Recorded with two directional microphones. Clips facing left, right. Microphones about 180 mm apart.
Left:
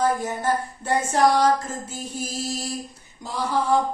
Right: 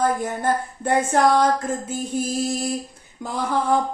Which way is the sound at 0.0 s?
55° right (ahead or behind).